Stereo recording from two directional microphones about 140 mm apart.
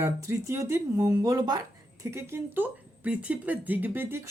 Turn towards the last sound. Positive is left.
turn(degrees=-15)  # may be behind; listen again after turning